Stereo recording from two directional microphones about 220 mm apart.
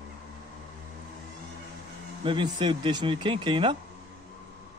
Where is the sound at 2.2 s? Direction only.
20° right (ahead or behind).